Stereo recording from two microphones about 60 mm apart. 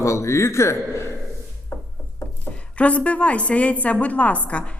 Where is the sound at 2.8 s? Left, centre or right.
Left.